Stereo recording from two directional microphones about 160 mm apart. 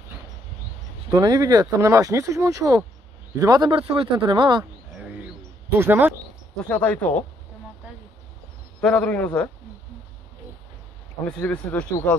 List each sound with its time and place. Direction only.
1.1 s speech: 25° right (ahead or behind)
3.7 s speech: 35° right (ahead or behind)
5.0 s a sound: 5° right (ahead or behind)
5.8 s speech: 10° right (ahead or behind)
6.5 s speech: 5° left (ahead or behind)
8.8 s speech: 5° left (ahead or behind)
11.2 s speech: 5° left (ahead or behind)